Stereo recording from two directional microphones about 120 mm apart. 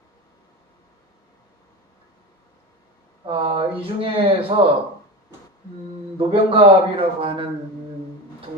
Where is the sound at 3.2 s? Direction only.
45° right (ahead or behind).